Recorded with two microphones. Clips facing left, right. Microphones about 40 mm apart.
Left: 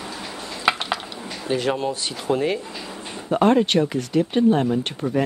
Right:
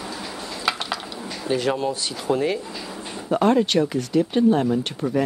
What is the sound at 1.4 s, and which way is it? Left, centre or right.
Speech, left.